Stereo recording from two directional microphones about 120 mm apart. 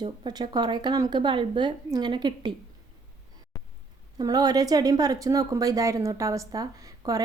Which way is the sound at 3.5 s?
25° left (ahead or behind).